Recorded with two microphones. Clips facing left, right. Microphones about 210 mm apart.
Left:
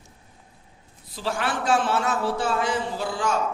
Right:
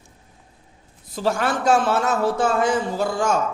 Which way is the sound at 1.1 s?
45° right (ahead or behind).